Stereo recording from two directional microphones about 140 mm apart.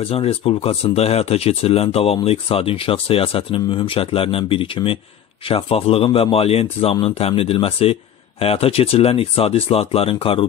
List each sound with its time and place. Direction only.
0.1 s a man's voice: 45° left (ahead or behind)